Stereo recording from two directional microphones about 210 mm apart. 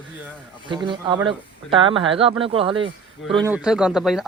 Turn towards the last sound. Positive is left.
turn(degrees=0)  # may be behind; listen again after turning